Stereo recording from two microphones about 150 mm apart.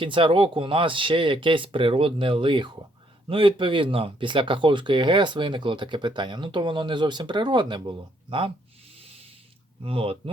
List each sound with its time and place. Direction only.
0.0 s speech: 35° right (ahead or behind)
9.0 s a sound: 40° right (ahead or behind)
9.8 s speech: 40° right (ahead or behind)